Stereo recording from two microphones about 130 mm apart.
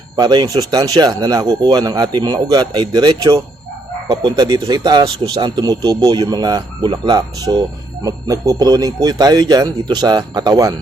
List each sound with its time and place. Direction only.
0.2 s speech: 30° right (ahead or behind)